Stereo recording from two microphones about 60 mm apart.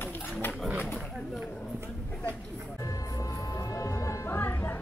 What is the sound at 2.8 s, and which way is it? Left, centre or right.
Music, left.